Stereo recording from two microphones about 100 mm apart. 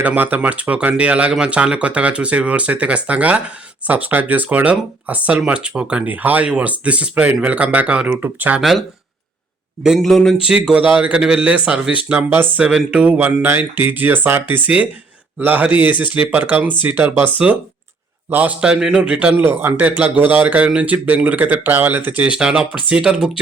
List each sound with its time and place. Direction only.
0.0 s speech: 15° right (ahead or behind)
9.8 s speech: centre (ahead or behind)
10.4 s speech: 10° right (ahead or behind)